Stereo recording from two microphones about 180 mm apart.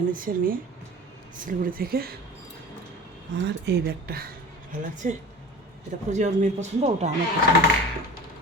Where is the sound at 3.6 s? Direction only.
60° right (ahead or behind).